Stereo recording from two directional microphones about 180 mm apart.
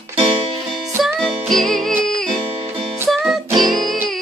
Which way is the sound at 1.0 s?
Centre (ahead or behind).